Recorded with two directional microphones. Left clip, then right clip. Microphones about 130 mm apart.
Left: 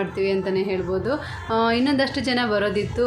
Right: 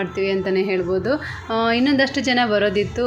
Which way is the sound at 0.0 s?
20° right (ahead or behind).